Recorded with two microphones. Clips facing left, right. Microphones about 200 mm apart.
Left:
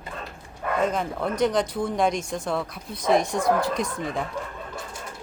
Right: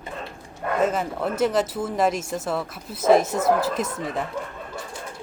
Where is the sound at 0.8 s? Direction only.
5° right (ahead or behind).